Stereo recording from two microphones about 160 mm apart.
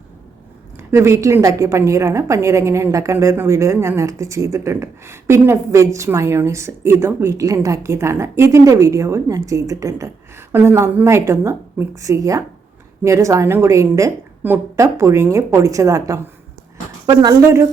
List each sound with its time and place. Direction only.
0.9 s a woman's voice: 15° right (ahead or behind)